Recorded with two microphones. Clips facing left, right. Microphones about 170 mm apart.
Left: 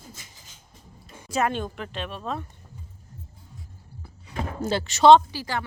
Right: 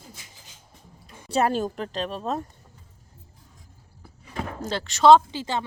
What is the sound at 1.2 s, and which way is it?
Speech, 35° right (ahead or behind).